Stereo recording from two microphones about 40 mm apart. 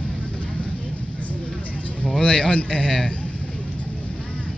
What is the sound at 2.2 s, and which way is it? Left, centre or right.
Speech, left.